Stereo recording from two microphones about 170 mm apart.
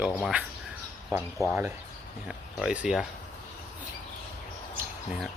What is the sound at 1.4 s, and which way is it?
Speech, 20° right (ahead or behind).